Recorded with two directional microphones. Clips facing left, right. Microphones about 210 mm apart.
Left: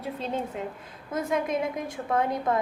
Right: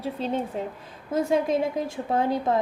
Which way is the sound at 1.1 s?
30° right (ahead or behind).